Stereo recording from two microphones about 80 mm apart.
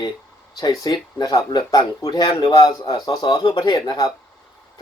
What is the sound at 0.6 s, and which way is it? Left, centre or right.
Speech, left.